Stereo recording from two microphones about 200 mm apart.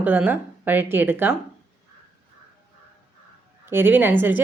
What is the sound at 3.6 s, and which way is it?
Speech, 10° right (ahead or behind).